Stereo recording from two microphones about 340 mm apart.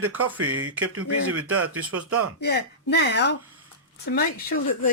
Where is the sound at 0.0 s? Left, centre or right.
Right.